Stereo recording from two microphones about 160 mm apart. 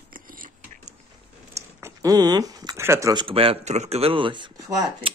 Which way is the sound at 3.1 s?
30° right (ahead or behind).